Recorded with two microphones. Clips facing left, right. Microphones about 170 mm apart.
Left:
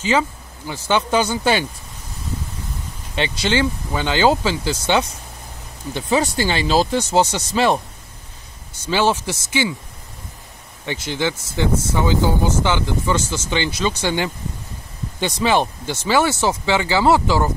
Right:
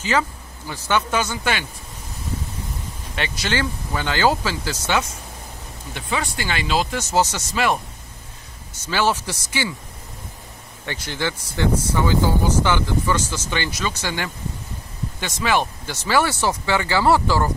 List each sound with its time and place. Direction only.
0.0 s speech: 20° left (ahead or behind)
3.2 s speech: 20° left (ahead or behind)
8.8 s speech: 25° left (ahead or behind)
10.9 s speech: 20° left (ahead or behind)